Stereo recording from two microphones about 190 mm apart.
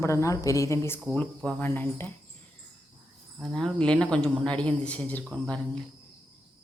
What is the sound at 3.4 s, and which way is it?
A woman's voice, centre (ahead or behind).